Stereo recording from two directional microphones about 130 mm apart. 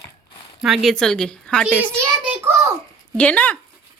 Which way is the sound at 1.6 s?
5° right (ahead or behind).